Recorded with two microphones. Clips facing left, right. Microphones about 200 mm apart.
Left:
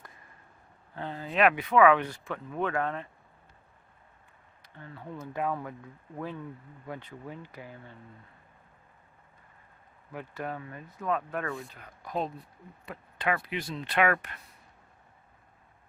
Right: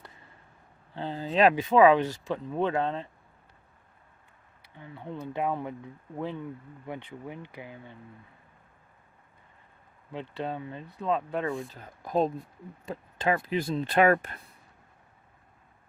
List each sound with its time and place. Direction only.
0.9 s speech: 30° right (ahead or behind)
4.6 s speech: 15° right (ahead or behind)
5.1 s speech: 35° right (ahead or behind)
5.4 s speech: 20° right (ahead or behind)
10.1 s speech: 25° right (ahead or behind)
11.8 s speech: 40° right (ahead or behind)
12.9 s speech: 30° right (ahead or behind)